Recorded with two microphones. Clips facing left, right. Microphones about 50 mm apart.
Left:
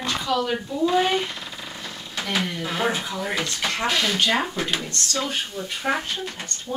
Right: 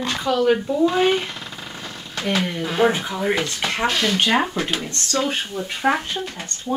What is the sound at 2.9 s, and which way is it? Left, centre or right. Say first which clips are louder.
Speech: right 5 dB; right.